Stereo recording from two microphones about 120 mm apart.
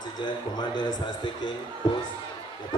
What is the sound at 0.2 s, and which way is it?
A man's voice, 40° left (ahead or behind).